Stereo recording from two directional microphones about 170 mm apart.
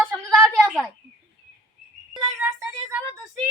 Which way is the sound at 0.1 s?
5° left (ahead or behind).